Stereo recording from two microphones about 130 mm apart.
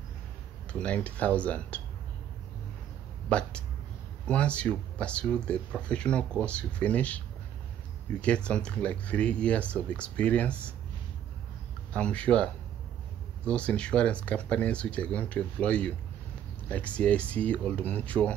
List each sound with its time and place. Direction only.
0.7 s speech: 10° left (ahead or behind)
3.3 s speech: 10° left (ahead or behind)
11.9 s speech: 10° left (ahead or behind)
13.5 s speech: 10° left (ahead or behind)